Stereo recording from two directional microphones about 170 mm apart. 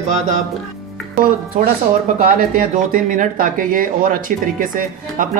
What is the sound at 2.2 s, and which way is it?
Speech, 55° right (ahead or behind).